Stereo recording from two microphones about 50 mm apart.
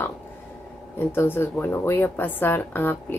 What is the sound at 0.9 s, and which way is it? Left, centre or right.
A woman's voice, left.